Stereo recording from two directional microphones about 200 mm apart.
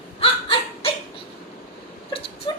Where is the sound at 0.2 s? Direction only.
30° left (ahead or behind).